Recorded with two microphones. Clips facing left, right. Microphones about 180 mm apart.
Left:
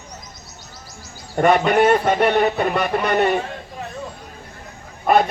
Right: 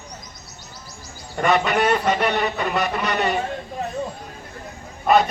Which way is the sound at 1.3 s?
45° left (ahead or behind).